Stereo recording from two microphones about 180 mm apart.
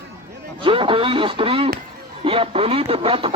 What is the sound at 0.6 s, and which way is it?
Speech, 30° right (ahead or behind).